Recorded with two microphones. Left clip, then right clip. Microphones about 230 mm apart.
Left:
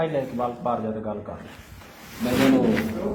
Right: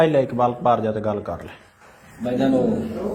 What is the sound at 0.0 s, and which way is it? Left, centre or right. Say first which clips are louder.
A man's voice: right 8 dB; right.